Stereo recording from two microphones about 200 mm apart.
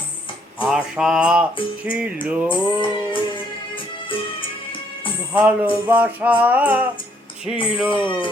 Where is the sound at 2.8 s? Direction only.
25° left (ahead or behind).